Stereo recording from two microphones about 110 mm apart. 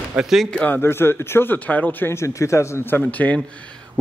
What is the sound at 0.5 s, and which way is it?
A man's voice, 15° left (ahead or behind).